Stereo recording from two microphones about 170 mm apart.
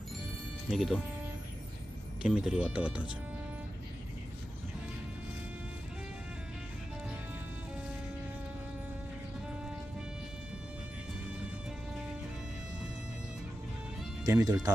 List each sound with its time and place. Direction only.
0.7 s speech: centre (ahead or behind)
2.2 s speech: 5° right (ahead or behind)
14.3 s speech: 15° right (ahead or behind)